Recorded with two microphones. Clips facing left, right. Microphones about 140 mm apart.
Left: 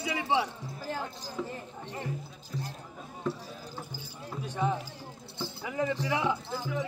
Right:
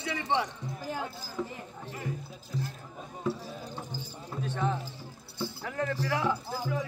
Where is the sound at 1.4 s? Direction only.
Centre (ahead or behind).